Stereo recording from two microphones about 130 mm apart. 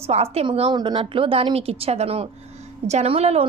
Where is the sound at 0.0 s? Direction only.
50° right (ahead or behind).